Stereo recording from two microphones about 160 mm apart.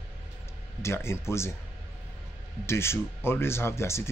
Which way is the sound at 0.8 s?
15° left (ahead or behind).